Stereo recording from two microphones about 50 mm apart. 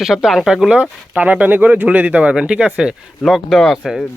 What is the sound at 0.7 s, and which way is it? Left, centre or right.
Speech, right.